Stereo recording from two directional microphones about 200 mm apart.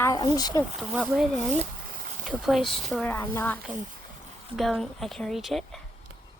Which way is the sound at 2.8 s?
Centre (ahead or behind).